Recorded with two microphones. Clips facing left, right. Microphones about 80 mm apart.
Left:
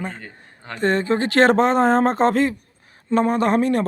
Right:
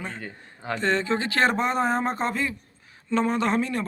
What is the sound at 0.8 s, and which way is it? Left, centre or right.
Speech, left.